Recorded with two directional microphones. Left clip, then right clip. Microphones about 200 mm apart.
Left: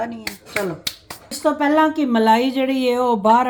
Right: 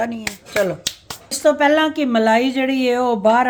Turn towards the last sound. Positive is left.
turn(degrees=-10)  # may be behind; listen again after turning